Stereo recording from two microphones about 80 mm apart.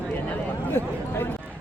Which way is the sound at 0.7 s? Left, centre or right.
Left.